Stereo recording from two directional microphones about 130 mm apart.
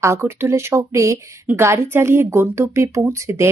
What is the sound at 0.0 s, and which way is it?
Speech, 20° right (ahead or behind).